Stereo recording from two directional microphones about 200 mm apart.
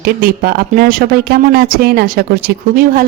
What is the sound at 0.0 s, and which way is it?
Speech, 50° right (ahead or behind).